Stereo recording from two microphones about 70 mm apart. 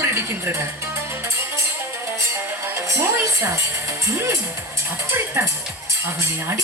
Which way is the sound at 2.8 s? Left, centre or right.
Right.